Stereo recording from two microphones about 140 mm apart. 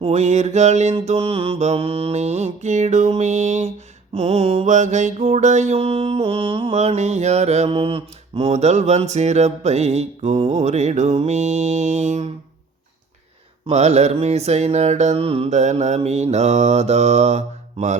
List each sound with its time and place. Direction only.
0.0 s mantra: 55° right (ahead or behind); by 6.7 s 40° right (ahead or behind)
6.7 s mantra: 55° right (ahead or behind)
13.7 s mantra: 50° right (ahead or behind)
15.5 s mantra: 55° right (ahead or behind)